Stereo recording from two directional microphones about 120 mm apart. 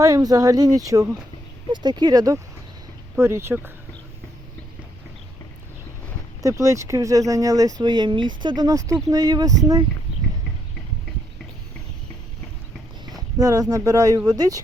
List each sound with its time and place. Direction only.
0.0 s speech: 30° right (ahead or behind)
6.4 s speech: 25° right (ahead or behind)
13.4 s speech: 30° right (ahead or behind)